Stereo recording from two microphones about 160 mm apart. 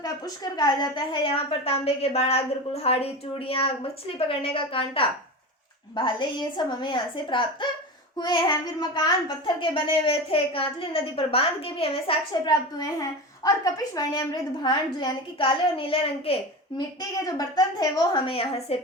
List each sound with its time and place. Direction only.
0.0 s a woman's voice: 25° left (ahead or behind)
12.5 s a woman's voice: 20° left (ahead or behind)
17.2 s a woman's voice: 25° left (ahead or behind)